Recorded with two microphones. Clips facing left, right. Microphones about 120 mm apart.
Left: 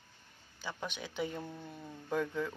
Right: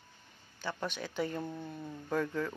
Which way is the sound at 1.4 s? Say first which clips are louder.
Right 4 dB; 10° right (ahead or behind).